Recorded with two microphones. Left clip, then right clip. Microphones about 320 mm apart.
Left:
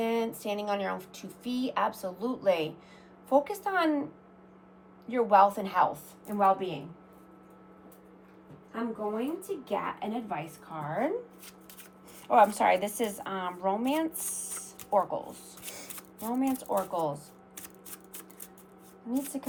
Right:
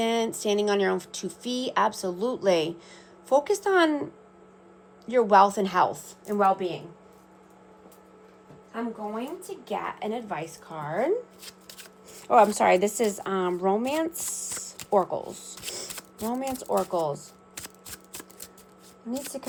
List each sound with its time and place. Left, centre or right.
0.0 s speech: right
5.0 s speech: right
9.6 s a woman's voice: right